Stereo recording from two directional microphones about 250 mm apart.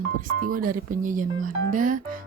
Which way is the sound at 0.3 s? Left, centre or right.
Right.